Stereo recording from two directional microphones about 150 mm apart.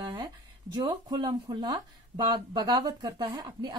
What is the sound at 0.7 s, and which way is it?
A woman's voice, 25° right (ahead or behind).